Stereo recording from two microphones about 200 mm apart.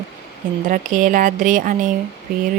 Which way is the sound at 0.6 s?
40° right (ahead or behind).